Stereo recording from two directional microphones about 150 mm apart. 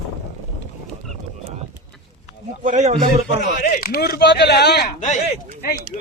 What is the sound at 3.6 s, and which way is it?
Speech, 75° left (ahead or behind).